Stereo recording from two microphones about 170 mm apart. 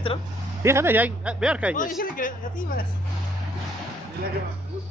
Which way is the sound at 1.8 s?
55° left (ahead or behind).